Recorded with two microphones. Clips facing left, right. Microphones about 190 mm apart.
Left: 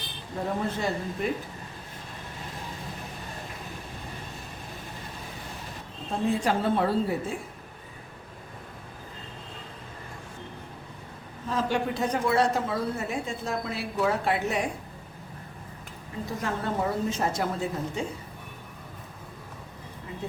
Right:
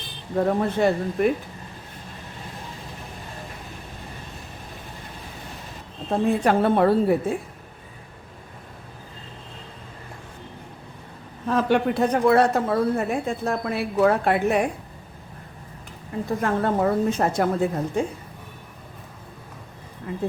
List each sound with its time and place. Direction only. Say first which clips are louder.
0.3 s a woman's voice: right 8 dB; 60° right (ahead or behind)
6.2 s a woman's voice: right 5 dB; 60° right (ahead or behind)
11.4 s a woman's voice: right 7 dB; 60° right (ahead or behind)
16.4 s a woman's voice: right 7 dB; 55° right (ahead or behind)
20.1 s speech: right 9 dB; 50° right (ahead or behind)